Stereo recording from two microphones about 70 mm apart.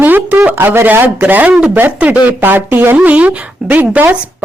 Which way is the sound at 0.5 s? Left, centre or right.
Right.